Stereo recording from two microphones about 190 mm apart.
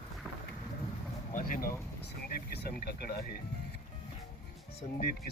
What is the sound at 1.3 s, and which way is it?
Speech, 45° left (ahead or behind).